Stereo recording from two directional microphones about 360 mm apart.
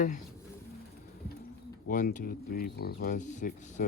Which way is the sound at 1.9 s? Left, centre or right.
Left.